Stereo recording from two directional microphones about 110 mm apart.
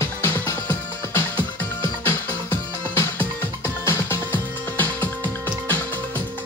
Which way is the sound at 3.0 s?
20° left (ahead or behind).